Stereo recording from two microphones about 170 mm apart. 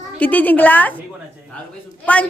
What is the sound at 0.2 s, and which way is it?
Speech, 10° left (ahead or behind).